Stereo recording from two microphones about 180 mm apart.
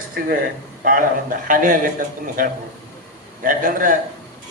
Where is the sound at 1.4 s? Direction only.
50° right (ahead or behind).